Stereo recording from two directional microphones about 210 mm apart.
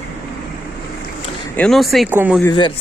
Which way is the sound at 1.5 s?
5° left (ahead or behind).